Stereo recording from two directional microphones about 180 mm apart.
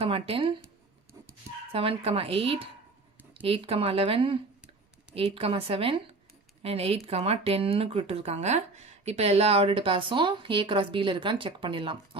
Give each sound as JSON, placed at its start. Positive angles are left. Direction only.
{"t": 0.0, "sound": "speech", "side_deg": -30}
{"t": 1.7, "sound": "speech", "side_deg": -30}